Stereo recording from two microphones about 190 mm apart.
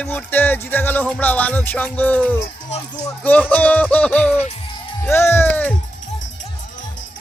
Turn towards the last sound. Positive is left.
turn(degrees=10)  # may be behind; listen again after turning